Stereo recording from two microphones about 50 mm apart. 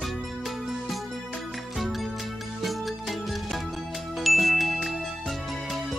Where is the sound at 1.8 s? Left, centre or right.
Centre.